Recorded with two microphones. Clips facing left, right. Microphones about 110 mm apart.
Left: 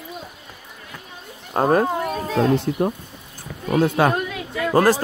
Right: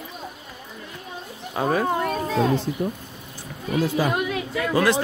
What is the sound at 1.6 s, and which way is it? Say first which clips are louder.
Speech: left 5 dB; 50° left (ahead or behind).